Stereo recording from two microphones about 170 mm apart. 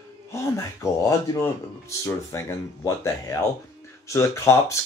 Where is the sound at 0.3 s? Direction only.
15° left (ahead or behind).